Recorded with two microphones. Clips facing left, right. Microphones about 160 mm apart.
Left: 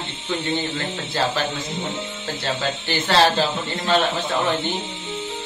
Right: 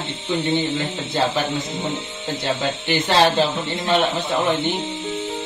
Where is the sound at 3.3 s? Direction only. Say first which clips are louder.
Right 2 dB; 20° right (ahead or behind).